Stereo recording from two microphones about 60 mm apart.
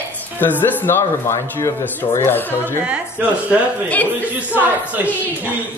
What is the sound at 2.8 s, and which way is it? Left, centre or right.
Speech, right.